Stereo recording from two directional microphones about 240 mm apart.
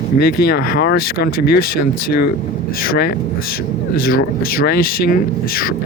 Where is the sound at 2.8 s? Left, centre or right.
Left.